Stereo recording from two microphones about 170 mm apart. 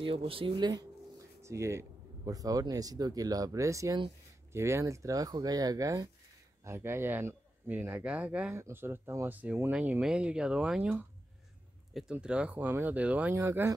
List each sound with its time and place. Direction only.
0.0 s speech: 30° right (ahead or behind); by 13.7 s 15° right (ahead or behind)